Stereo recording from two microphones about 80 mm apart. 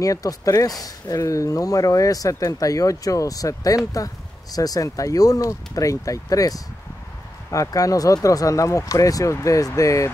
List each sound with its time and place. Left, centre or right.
0.0 s speech: left